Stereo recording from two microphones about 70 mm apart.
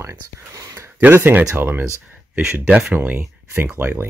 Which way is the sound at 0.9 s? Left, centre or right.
Right.